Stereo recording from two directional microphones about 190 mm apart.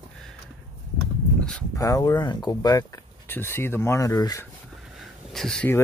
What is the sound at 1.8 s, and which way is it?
Speech, 20° left (ahead or behind).